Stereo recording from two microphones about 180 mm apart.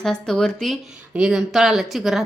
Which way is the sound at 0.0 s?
5° left (ahead or behind).